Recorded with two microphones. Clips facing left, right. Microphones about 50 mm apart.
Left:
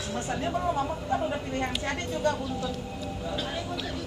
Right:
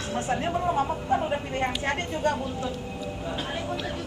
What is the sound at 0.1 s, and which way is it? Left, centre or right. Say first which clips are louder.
A woman's voice: right 3 dB; right.